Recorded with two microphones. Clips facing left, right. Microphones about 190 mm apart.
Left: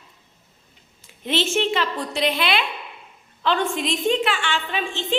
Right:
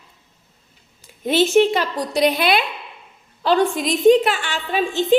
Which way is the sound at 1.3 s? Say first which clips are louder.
Right 7 dB; 40° right (ahead or behind).